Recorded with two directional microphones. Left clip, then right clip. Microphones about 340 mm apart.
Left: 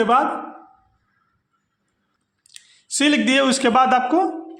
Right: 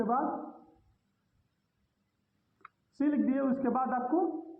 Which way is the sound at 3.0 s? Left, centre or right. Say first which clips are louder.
Left 14 dB; left.